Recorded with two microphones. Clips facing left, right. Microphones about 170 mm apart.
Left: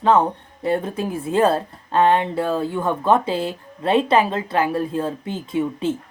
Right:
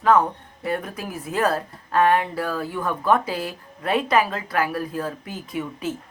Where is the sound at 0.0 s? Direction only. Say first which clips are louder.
Left 2 dB; 25° left (ahead or behind).